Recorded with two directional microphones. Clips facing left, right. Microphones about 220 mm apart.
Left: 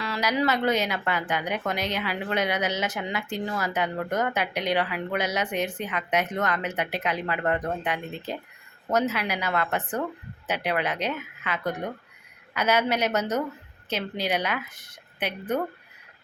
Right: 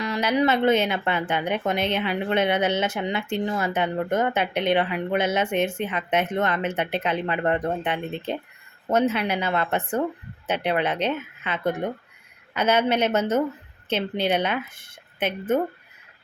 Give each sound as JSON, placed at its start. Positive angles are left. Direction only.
{"t": 0.0, "sound": "speech", "side_deg": -25}